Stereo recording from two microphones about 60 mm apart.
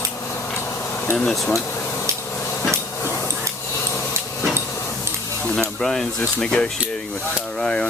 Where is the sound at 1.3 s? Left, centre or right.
Centre.